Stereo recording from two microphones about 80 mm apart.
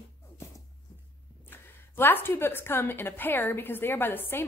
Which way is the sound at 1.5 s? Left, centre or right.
Left.